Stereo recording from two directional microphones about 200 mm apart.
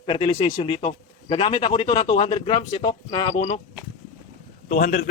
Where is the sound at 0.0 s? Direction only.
25° left (ahead or behind).